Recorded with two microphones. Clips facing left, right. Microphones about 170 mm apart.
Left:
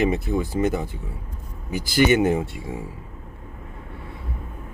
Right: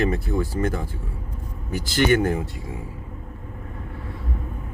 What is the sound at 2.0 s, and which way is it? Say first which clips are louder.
Speech: left 2 dB; 20° left (ahead or behind).